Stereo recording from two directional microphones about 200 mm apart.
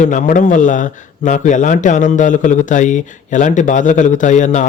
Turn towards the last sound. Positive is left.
turn(degrees=35)  # may be behind; listen again after turning